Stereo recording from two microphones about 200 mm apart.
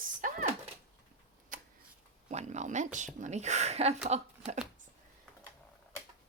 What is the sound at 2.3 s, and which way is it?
Speech, 35° right (ahead or behind).